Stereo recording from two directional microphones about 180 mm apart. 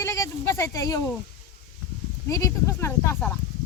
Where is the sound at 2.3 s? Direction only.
15° left (ahead or behind).